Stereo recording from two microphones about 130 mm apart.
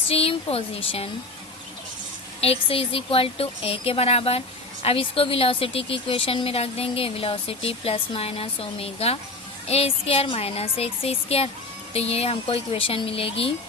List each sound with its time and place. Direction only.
0.1 s a woman's voice: 45° left (ahead or behind)
2.4 s a woman's voice: 45° left (ahead or behind)